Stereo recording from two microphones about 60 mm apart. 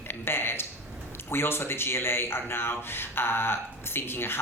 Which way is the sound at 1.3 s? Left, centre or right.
Left.